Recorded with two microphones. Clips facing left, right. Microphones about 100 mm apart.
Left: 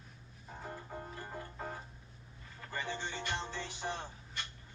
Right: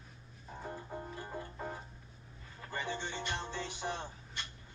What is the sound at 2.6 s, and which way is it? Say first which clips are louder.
Music: right 1 dB; 25° right (ahead or behind).